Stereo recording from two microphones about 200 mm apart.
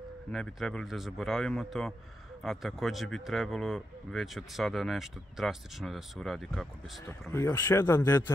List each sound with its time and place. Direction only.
0.3 s speech: 5° left (ahead or behind)
7.1 s speech: 15° left (ahead or behind)